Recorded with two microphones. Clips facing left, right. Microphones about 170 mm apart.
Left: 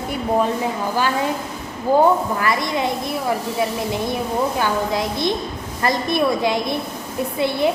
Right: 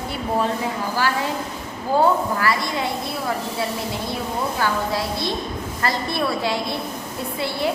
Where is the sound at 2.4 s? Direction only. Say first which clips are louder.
Left 2 dB; 20° left (ahead or behind).